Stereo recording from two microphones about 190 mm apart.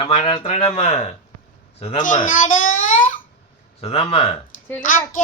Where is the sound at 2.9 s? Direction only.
40° left (ahead or behind).